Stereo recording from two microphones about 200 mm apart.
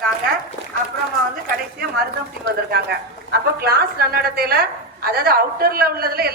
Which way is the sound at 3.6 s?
50° right (ahead or behind).